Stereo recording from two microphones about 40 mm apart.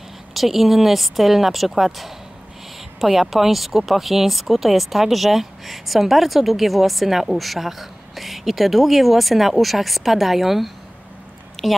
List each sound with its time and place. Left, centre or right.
0.3 s a woman's voice: centre